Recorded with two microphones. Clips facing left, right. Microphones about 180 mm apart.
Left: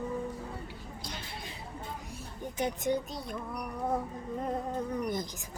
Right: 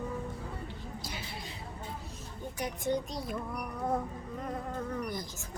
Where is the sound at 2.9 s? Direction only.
Centre (ahead or behind).